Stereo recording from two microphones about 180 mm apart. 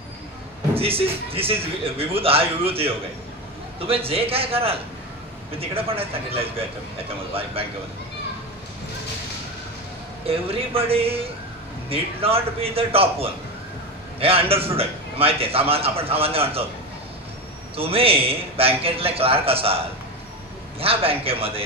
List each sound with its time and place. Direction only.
0.7 s a man's voice: 30° right (ahead or behind)
10.2 s a man's voice: 30° right (ahead or behind)
17.7 s a man's voice: 30° right (ahead or behind)
20.8 s a man's voice: 30° right (ahead or behind)